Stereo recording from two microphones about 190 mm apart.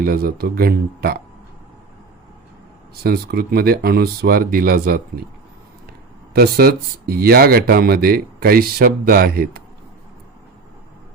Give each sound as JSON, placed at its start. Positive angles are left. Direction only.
{"t": 0.0, "sound": "speech", "side_deg": -50}
{"t": 3.0, "sound": "speech", "side_deg": -55}
{"t": 6.3, "sound": "speech", "side_deg": -55}